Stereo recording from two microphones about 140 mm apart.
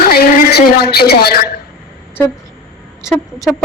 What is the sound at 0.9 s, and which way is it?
Music, 90° left.